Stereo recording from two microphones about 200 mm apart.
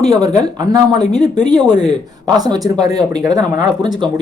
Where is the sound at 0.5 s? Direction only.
20° right (ahead or behind).